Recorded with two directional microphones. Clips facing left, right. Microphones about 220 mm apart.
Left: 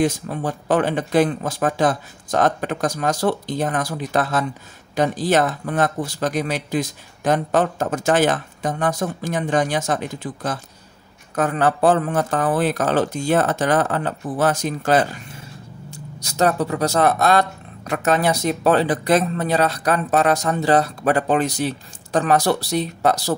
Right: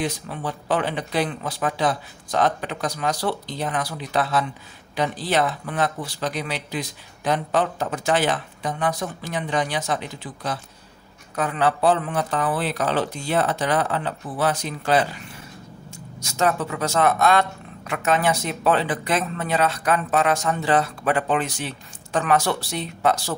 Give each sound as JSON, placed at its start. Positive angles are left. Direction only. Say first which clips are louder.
{"t": 0.0, "sound": "speech", "louder": "left 6 dB", "side_deg": 45}